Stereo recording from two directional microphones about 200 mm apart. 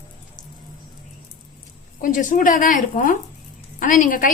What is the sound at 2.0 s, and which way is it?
A woman's voice, 40° left (ahead or behind).